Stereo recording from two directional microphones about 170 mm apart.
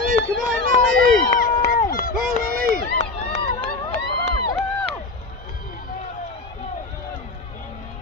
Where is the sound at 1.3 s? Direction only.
50° left (ahead or behind).